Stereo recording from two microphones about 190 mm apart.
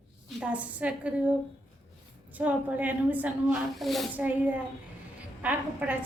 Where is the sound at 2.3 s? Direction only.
10° right (ahead or behind).